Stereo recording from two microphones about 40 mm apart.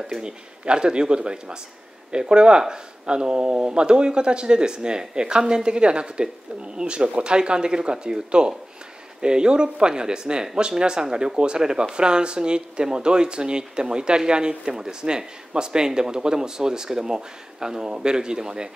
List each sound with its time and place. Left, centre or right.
0.0 s speech: right